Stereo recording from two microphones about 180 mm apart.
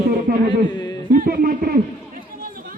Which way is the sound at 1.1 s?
55° right (ahead or behind).